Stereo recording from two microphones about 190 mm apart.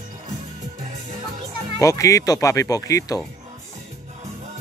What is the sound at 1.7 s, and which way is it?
Speech, 15° left (ahead or behind).